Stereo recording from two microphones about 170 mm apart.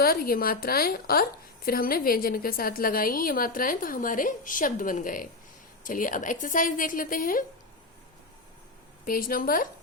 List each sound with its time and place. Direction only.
0.0 s a woman's voice: 60° left (ahead or behind)
9.0 s a woman's voice: 55° left (ahead or behind)